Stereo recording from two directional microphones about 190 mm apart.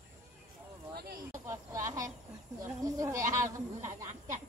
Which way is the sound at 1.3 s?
15° right (ahead or behind).